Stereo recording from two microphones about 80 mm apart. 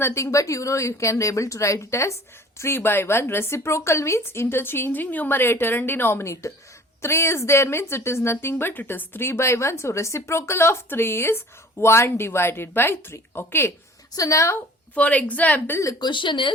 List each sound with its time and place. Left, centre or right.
0.0 s a woman's voice: left
14.1 s a woman's voice: left
14.9 s a woman's voice: centre
16.0 s speech: left